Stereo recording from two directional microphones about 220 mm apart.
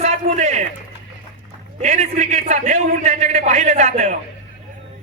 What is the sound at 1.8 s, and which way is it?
A man's voice, 30° right (ahead or behind).